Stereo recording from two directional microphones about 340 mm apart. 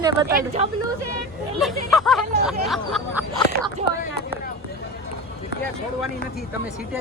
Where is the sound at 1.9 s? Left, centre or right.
Centre.